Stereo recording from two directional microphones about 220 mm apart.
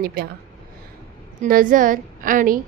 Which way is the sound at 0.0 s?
45° right (ahead or behind).